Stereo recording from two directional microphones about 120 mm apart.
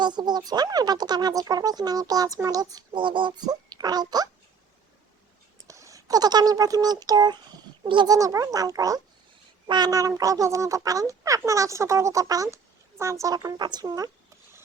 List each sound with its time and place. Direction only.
0.0 s speech: 35° right (ahead or behind)
5.6 s speech: 25° right (ahead or behind)